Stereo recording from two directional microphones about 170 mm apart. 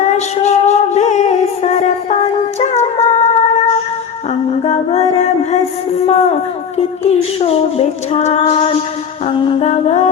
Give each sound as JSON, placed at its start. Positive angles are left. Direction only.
{"t": 0.0, "sound": "music", "side_deg": 45}
{"t": 2.6, "sound": "humming", "side_deg": 40}
{"t": 4.4, "sound": "music", "side_deg": 40}
{"t": 6.1, "sound": "speech", "side_deg": 40}